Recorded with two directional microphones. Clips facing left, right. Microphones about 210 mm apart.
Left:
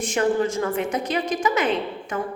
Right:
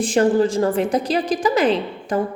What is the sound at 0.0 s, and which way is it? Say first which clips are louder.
A woman's voice: right 5 dB; 35° right (ahead or behind).